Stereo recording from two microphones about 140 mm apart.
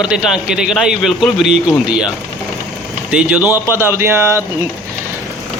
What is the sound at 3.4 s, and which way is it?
Speech, 25° left (ahead or behind).